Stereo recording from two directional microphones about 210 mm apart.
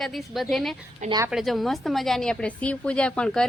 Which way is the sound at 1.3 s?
Centre (ahead or behind).